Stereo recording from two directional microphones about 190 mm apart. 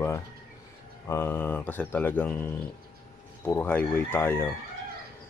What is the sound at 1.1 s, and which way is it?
Speech, 10° left (ahead or behind).